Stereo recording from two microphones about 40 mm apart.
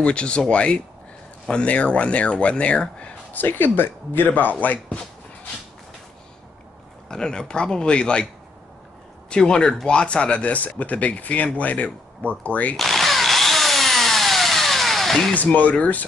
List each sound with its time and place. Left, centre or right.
0.0 s speech: left
3.3 s speech: left
7.1 s speech: centre
9.3 s speech: left
12.7 s drill: centre
15.4 s speech: left